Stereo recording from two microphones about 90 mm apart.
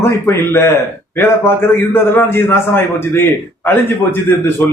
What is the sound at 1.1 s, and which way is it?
A man's voice, 25° left (ahead or behind).